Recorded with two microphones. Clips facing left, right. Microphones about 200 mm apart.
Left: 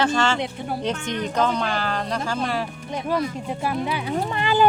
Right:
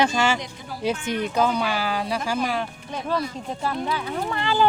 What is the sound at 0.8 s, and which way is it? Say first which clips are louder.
Speech: right 4 dB; 10° right (ahead or behind).